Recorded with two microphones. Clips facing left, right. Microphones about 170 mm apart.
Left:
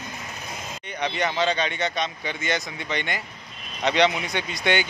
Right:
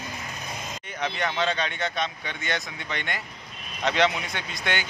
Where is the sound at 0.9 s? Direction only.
Centre (ahead or behind).